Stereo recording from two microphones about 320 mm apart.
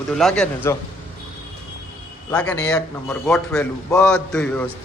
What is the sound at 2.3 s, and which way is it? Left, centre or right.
A man's voice, centre.